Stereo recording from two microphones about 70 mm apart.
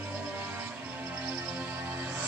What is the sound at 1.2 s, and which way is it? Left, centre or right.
Music, right.